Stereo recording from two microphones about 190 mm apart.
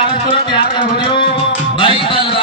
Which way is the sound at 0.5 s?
25° left (ahead or behind).